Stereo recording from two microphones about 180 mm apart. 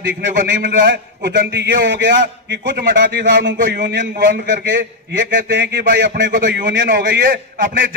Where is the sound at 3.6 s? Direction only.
70° right (ahead or behind).